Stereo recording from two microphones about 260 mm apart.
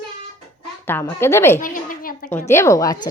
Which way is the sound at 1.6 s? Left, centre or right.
Left.